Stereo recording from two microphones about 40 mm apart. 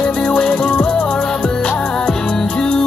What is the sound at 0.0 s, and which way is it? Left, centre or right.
Music, left.